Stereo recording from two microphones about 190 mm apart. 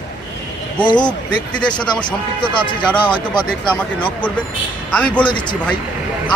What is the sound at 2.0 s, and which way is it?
Speech, 25° left (ahead or behind).